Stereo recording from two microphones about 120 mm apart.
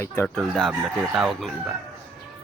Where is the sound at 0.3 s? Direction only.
5° left (ahead or behind).